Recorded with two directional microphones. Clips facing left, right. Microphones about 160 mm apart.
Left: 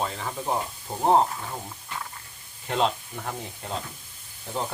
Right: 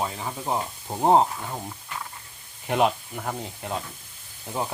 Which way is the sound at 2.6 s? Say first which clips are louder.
Right 3 dB; 10° right (ahead or behind).